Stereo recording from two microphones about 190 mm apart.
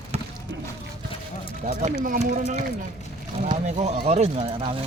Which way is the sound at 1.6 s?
40° right (ahead or behind).